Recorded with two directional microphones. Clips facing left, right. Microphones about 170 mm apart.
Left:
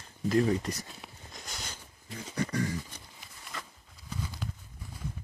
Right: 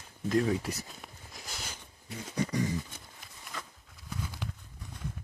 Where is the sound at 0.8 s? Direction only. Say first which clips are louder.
Even; centre (ahead or behind).